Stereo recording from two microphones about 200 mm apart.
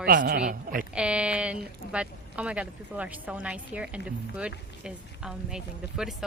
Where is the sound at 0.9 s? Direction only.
5° right (ahead or behind).